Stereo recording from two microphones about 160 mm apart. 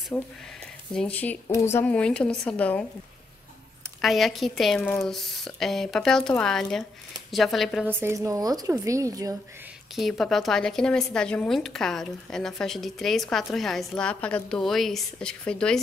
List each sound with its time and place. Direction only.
0.1 s speech: centre (ahead or behind)
4.0 s speech: centre (ahead or behind)
7.8 s a woman's voice: 15° right (ahead or behind)
9.9 s speech: centre (ahead or behind)